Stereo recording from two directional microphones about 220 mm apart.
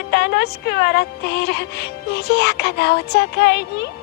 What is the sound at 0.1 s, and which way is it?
Speech, 50° left (ahead or behind).